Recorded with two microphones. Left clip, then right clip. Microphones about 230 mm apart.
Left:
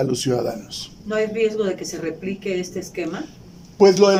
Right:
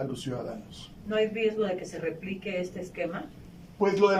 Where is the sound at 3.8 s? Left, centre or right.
Left.